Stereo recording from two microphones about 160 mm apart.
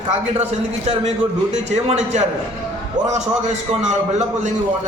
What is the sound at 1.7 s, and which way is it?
A man's voice, 45° right (ahead or behind).